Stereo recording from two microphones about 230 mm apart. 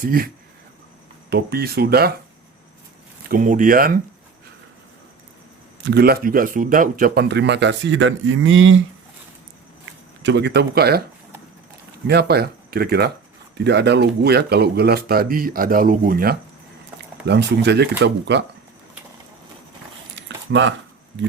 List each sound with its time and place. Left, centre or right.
1.3 s speech: right
3.2 s speech: right
5.8 s speech: right
10.2 s speech: right
12.0 s speech: right
20.1 s keys jangling: right